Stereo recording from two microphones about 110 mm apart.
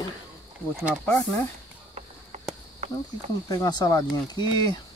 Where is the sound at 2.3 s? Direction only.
90° right.